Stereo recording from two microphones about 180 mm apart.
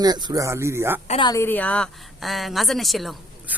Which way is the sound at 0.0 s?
20° right (ahead or behind).